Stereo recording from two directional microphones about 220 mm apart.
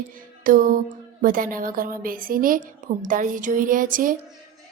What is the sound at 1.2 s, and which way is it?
Speech, 40° right (ahead or behind).